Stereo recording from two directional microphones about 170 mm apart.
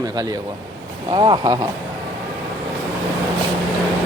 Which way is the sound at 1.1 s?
30° right (ahead or behind).